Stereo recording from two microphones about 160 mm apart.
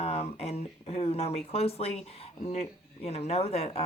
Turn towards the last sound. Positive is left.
turn(degrees=40)  # may be behind; listen again after turning